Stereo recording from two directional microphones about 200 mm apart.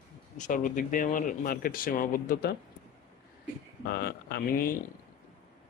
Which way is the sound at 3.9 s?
50° left (ahead or behind).